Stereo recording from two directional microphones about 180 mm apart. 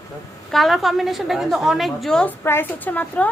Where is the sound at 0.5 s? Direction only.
Centre (ahead or behind).